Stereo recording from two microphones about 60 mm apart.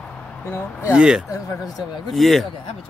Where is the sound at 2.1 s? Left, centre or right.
Centre.